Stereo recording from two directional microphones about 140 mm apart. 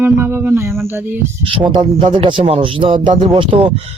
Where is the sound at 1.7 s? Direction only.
35° right (ahead or behind).